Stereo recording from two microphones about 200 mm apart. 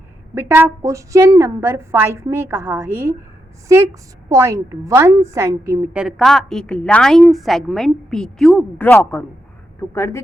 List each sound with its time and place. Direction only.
0.3 s a woman's voice: 10° right (ahead or behind)
4.3 s a woman's voice: 15° right (ahead or behind); by 10.2 s 15° left (ahead or behind)